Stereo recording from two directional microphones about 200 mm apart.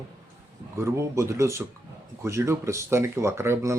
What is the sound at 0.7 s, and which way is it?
Speech, 15° right (ahead or behind).